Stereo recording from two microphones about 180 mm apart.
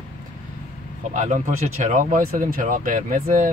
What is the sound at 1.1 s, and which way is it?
Speech, 45° right (ahead or behind).